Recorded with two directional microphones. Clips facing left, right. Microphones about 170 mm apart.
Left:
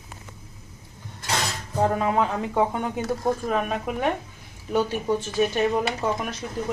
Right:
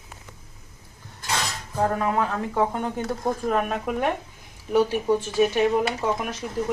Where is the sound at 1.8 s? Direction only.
20° left (ahead or behind).